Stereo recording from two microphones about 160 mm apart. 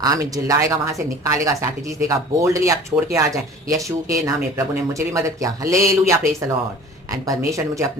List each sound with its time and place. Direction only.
0.0 s speech: 20° right (ahead or behind)